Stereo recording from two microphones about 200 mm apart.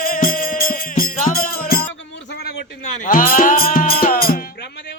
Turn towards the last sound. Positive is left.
turn(degrees=45)  # may be behind; listen again after turning